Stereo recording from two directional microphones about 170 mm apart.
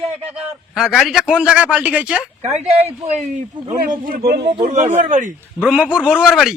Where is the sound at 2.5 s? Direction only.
35° right (ahead or behind); by 4.7 s 65° right (ahead or behind).